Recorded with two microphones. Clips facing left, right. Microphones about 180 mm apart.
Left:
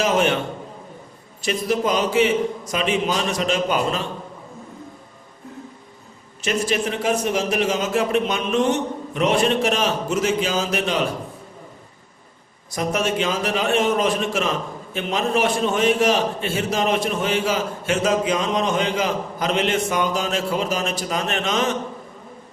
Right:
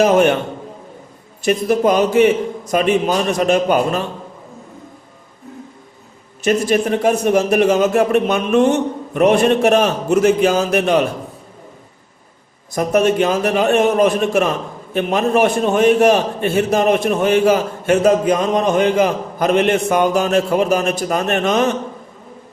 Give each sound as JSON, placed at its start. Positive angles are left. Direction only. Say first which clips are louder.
{"t": 0.0, "sound": "a man's voice", "louder": "right 7 dB", "side_deg": -50}
{"t": 1.5, "sound": "a man's voice", "louder": "right 7 dB", "side_deg": -55}
{"t": 6.4, "sound": "a man's voice", "louder": "right 7 dB", "side_deg": -45}
{"t": 12.7, "sound": "a man's voice", "louder": "right 8 dB", "side_deg": -55}